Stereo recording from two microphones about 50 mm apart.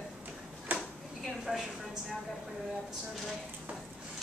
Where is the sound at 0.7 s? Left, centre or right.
Right.